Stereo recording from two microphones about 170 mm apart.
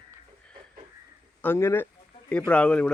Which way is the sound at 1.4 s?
15° left (ahead or behind).